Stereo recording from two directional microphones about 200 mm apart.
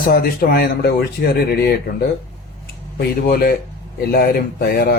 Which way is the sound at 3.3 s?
45° left (ahead or behind).